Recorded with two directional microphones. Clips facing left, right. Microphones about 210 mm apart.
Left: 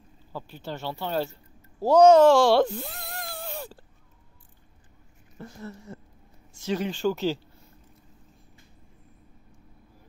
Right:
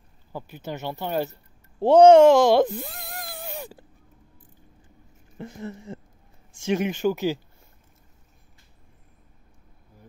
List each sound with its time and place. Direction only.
0.3 s speech: 15° right (ahead or behind)
1.8 s speech: 30° right (ahead or behind)
3.3 s a sound: 15° right (ahead or behind)
5.4 s speech: 20° right (ahead or behind)